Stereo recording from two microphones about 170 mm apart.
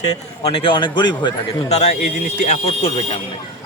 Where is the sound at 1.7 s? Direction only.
40° left (ahead or behind).